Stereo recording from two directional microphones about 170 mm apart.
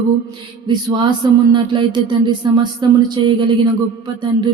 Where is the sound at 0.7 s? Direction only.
25° right (ahead or behind).